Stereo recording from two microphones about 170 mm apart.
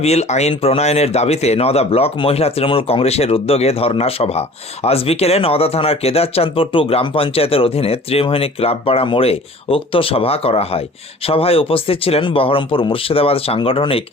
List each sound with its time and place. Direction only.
0.0 s speech: 40° left (ahead or behind)